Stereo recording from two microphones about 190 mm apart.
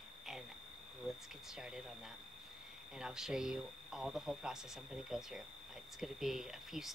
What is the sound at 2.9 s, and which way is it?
Speech, 5° right (ahead or behind).